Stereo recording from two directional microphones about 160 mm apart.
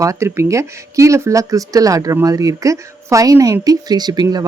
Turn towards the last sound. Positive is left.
turn(degrees=-25)  # may be behind; listen again after turning